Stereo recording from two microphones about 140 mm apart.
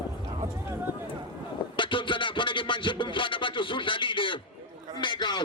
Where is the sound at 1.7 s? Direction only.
35° left (ahead or behind).